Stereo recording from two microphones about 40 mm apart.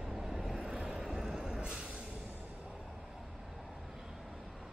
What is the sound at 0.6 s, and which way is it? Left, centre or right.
Vehicle, right.